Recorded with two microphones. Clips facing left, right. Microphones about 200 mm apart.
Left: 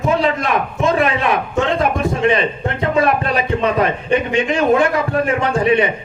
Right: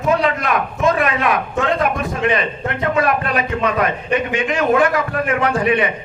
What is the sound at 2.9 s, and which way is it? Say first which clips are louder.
A man's voice: left 3 dB; 30° left (ahead or behind).